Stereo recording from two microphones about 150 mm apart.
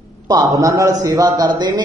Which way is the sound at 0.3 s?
20° right (ahead or behind).